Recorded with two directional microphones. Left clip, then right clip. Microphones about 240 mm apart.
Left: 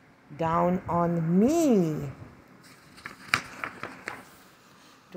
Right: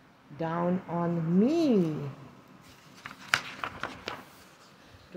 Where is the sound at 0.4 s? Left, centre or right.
Centre.